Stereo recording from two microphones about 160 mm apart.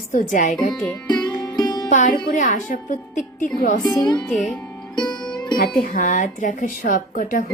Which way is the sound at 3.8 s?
25° left (ahead or behind).